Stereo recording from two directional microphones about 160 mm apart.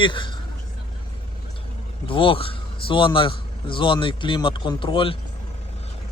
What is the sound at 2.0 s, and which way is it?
A man's voice, 35° left (ahead or behind).